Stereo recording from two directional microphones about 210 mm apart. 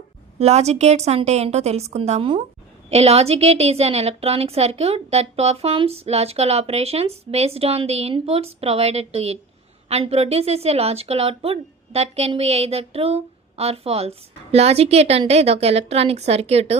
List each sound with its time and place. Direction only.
0.3 s a woman's voice: 30° right (ahead or behind)